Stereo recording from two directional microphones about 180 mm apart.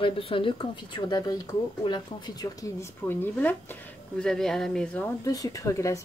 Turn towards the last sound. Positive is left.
turn(degrees=15)  # may be behind; listen again after turning